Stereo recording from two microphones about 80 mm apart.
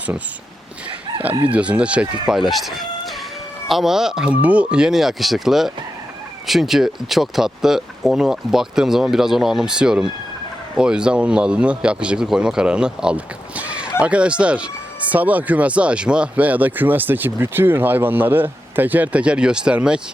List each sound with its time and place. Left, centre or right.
1.5 s speech: centre
2.3 s speech: centre